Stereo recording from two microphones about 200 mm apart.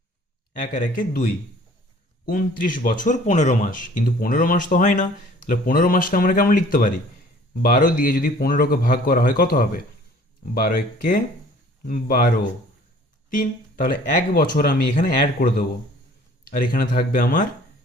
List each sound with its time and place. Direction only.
0.7 s speech: 45° left (ahead or behind)
13.3 s speech: 45° left (ahead or behind)